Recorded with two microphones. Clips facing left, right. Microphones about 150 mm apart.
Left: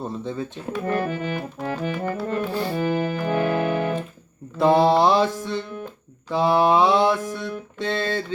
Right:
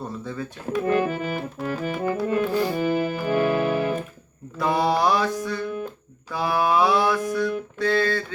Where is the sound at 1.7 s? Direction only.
5° right (ahead or behind).